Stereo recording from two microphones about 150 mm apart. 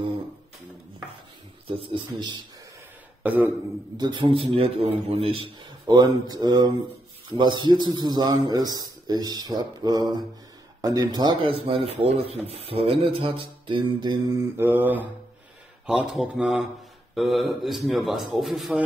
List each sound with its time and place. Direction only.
1.7 s a man's voice: 35° right (ahead or behind)
3.2 s throat clearing: 10° right (ahead or behind)
3.9 s a man's voice: 30° right (ahead or behind)
11.6 s a man's voice: 40° right (ahead or behind); by 14.7 s 25° right (ahead or behind)
14.7 s speech: 10° right (ahead or behind)